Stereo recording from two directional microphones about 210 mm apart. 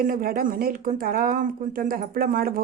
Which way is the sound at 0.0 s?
45° right (ahead or behind).